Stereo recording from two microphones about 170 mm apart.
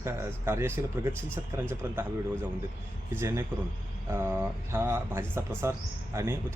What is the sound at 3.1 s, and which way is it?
Speech, 15° right (ahead or behind).